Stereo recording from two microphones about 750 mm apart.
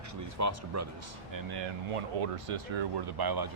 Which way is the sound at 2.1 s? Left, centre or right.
Right.